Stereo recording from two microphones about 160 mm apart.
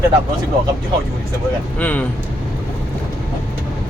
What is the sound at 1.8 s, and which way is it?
Speech, 10° left (ahead or behind).